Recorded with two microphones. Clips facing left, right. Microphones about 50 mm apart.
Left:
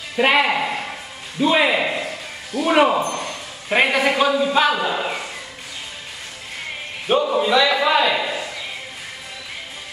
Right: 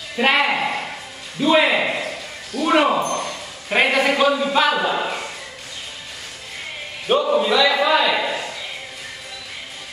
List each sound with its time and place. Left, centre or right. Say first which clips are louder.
0.2 s speech: left 1 dB; centre
1.7 s a man's voice: even; centre
2.6 s speech: left 1 dB; centre
3.1 s a sound: right 2 dB; centre
3.7 s speech: even; centre
7.1 s a sound: even; centre